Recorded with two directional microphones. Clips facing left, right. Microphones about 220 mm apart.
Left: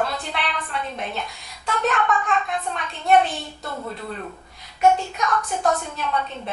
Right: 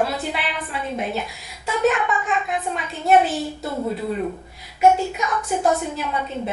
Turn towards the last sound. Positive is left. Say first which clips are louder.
# right 1 dB
turn(degrees=-5)  # may be behind; listen again after turning